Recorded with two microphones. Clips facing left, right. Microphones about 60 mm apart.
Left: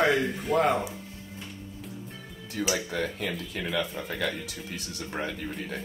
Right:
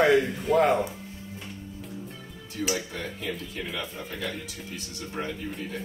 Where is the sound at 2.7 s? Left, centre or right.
Left.